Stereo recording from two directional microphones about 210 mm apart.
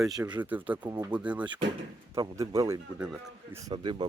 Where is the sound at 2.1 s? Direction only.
15° right (ahead or behind).